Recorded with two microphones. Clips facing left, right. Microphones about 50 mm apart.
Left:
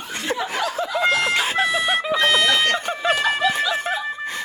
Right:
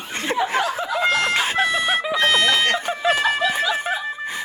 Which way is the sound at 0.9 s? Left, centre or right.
Centre.